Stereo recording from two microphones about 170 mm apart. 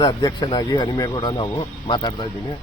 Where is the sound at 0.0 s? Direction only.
25° left (ahead or behind).